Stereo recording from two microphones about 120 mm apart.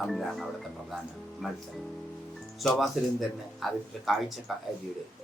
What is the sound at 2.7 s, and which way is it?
Speech, centre (ahead or behind).